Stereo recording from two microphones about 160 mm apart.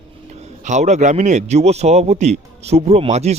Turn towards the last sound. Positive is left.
turn(degrees=-45)  # may be behind; listen again after turning